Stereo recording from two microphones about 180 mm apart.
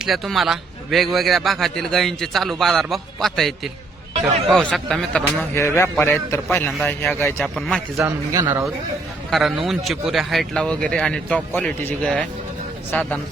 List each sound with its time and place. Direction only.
0.0 s a man's voice: centre (ahead or behind)
4.7 s a man's voice: 5° left (ahead or behind)
5.5 s a man's voice: 15° left (ahead or behind)
8.0 s a man's voice: 15° right (ahead or behind)
9.3 s a man's voice: centre (ahead or behind)